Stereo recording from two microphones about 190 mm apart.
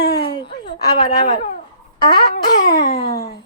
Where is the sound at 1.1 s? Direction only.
35° left (ahead or behind).